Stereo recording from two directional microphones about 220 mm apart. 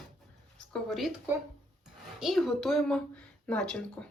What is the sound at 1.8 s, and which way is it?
Speech, centre (ahead or behind).